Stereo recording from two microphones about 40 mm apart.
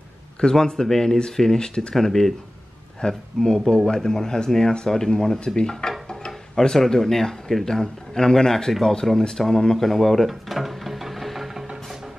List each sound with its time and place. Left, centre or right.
0.4 s speech: centre
9.8 s music: centre